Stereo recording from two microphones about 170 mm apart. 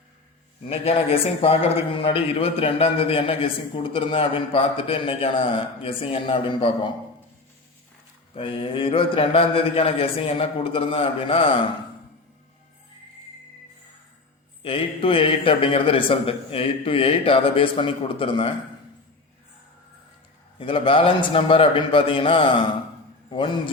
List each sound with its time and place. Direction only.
0.6 s a man's voice: 35° left (ahead or behind)
8.4 s a man's voice: 30° left (ahead or behind)
14.6 s a man's voice: 30° left (ahead or behind)
20.6 s a man's voice: 30° left (ahead or behind)